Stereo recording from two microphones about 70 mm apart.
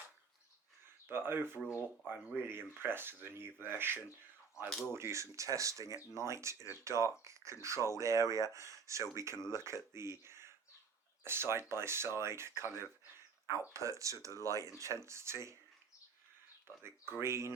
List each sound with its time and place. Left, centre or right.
1.0 s speech: right
13.7 s speech: right
16.6 s speech: right